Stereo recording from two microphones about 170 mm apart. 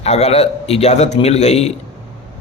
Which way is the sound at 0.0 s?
40° left (ahead or behind).